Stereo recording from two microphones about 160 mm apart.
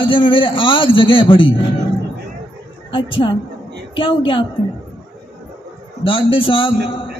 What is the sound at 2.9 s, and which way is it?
A man's voice, 30° left (ahead or behind).